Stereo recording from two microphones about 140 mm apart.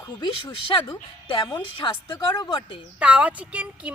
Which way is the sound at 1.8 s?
30° left (ahead or behind).